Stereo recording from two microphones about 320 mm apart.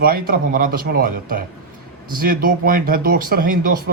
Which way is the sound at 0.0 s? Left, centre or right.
Right.